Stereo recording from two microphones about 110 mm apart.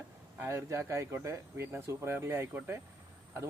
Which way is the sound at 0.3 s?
25° right (ahead or behind).